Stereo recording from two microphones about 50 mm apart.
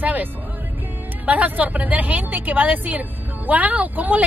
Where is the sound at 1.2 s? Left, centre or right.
Right.